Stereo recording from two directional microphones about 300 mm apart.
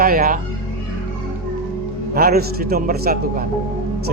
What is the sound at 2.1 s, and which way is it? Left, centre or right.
A man's voice, right.